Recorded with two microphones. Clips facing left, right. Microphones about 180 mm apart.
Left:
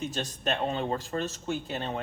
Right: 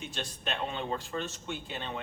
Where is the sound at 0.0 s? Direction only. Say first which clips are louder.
Left 6 dB; 40° left (ahead or behind).